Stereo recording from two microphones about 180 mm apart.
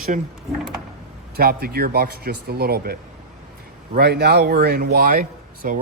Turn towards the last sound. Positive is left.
turn(degrees=-50)  # may be behind; listen again after turning